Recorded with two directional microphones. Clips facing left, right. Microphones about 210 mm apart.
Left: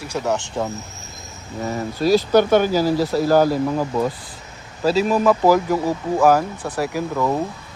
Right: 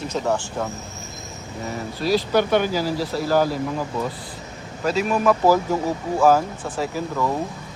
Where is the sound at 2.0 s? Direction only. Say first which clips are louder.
Left 5 dB; 45° left (ahead or behind).